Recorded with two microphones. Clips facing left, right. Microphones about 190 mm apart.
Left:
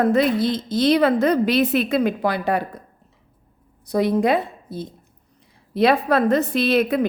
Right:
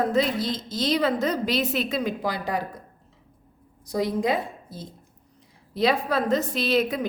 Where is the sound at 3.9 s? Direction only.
60° left (ahead or behind).